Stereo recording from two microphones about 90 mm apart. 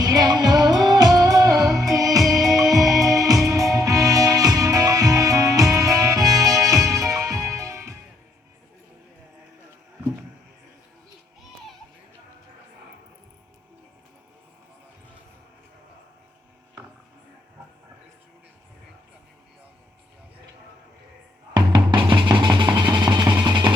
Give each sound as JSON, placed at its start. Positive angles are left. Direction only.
{"t": 0.0, "sound": "music", "side_deg": -45}
{"t": 21.5, "sound": "drum", "side_deg": -55}
{"t": 22.4, "sound": "music", "side_deg": -60}